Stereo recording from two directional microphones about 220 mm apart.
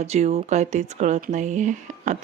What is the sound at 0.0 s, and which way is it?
Speech, 30° right (ahead or behind).